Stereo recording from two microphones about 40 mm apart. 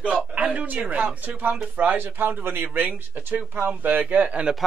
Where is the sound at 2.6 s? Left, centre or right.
Right.